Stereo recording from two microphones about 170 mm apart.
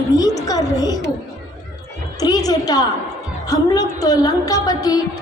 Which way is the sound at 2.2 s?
20° left (ahead or behind).